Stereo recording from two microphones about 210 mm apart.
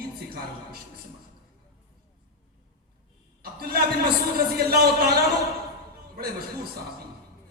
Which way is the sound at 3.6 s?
45° right (ahead or behind).